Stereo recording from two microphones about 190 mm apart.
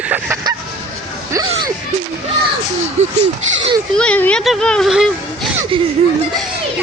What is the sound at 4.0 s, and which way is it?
Speech, 5° left (ahead or behind).